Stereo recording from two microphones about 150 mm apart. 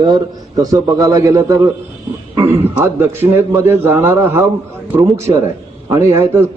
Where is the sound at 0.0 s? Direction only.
25° right (ahead or behind).